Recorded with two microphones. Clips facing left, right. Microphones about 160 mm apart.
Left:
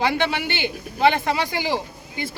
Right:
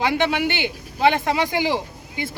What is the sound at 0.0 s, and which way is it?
Speech, 15° right (ahead or behind).